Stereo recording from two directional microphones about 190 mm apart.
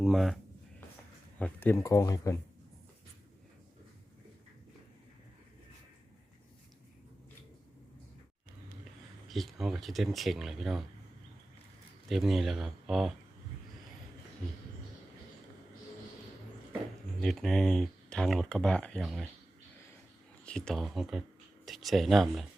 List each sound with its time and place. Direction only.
0.0 s speech: centre (ahead or behind)
1.4 s speech: 10° left (ahead or behind)
9.3 s speech: centre (ahead or behind)
12.0 s speech: centre (ahead or behind)
17.2 s speech: 5° left (ahead or behind)
20.4 s speech: 5° left (ahead or behind)